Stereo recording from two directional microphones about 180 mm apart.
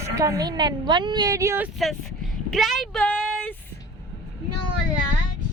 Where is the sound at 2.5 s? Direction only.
Centre (ahead or behind).